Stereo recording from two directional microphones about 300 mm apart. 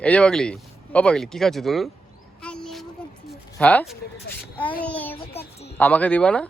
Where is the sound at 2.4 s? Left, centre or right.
Centre.